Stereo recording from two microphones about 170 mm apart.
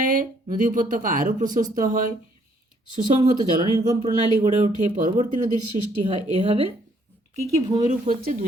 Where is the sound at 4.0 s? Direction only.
45° right (ahead or behind).